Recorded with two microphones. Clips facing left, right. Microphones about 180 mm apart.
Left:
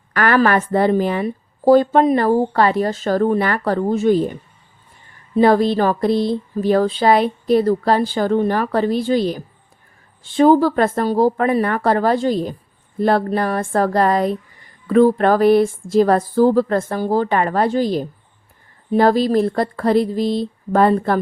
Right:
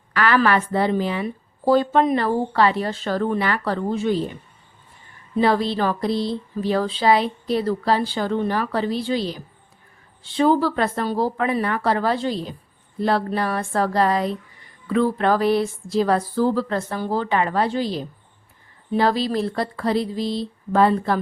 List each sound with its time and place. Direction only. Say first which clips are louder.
0.1 s a woman's voice: left 3 dB; 45° left (ahead or behind)
5.4 s speech: left 6 dB; 50° left (ahead or behind)